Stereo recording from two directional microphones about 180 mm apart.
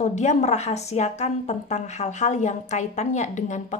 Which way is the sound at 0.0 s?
40° left (ahead or behind).